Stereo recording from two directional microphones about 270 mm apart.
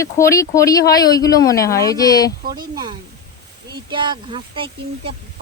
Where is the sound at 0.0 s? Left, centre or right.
Centre.